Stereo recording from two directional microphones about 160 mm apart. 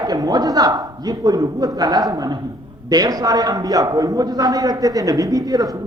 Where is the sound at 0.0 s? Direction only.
25° right (ahead or behind).